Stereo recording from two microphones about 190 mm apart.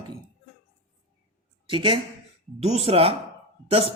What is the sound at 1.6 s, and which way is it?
A woman's voice, 25° right (ahead or behind).